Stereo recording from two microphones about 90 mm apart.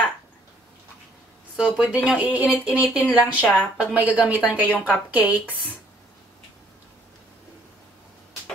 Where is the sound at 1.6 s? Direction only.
10° right (ahead or behind).